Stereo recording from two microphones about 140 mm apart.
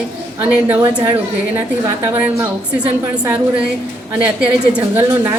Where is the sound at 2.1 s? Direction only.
10° right (ahead or behind).